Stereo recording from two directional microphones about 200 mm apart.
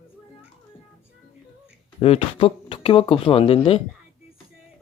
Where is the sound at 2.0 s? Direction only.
30° left (ahead or behind).